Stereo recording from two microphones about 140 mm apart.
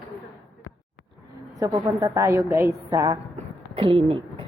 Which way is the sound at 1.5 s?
25° right (ahead or behind).